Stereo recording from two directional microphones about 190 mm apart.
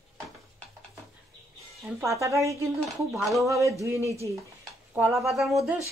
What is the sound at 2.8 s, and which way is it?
Speech, centre (ahead or behind).